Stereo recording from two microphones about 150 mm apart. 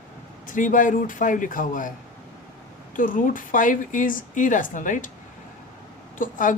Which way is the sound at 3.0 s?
65° left (ahead or behind).